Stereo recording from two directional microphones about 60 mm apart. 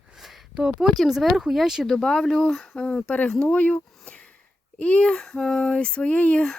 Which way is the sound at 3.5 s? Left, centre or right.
Left.